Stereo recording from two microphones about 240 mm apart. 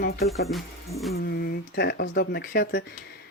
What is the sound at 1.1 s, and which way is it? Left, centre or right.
Speech, left.